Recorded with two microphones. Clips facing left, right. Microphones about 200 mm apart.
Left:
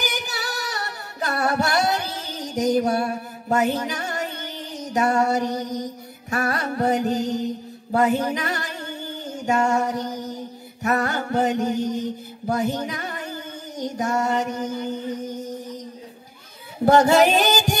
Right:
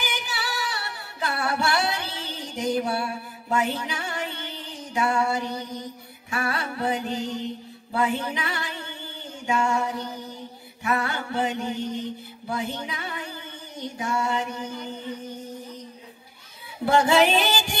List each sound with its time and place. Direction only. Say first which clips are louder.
0.0 s female singing: left 3 dB; 40° left (ahead or behind)
6.3 s music: left 5 dB; 40° left (ahead or behind)
16.8 s music: left 4 dB; 40° left (ahead or behind)